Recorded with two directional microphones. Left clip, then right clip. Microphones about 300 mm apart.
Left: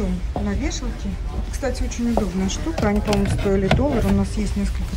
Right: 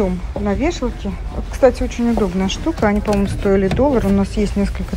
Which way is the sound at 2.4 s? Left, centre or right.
Centre.